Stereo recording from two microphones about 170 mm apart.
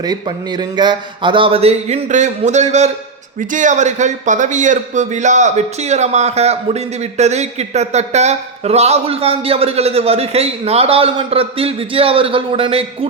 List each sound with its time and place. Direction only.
0.0 s a man's voice: 25° right (ahead or behind)